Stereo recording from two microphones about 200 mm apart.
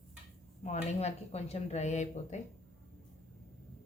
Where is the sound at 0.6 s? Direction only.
35° left (ahead or behind).